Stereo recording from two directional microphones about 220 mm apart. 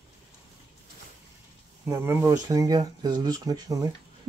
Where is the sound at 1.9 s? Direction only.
10° right (ahead or behind).